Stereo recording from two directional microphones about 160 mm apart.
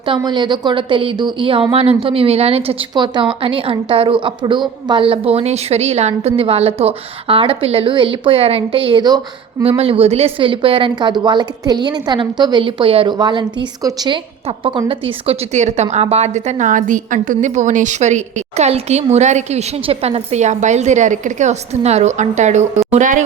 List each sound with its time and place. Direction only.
0.0 s a woman's voice: 30° right (ahead or behind)
9.6 s a woman's voice: 40° right (ahead or behind)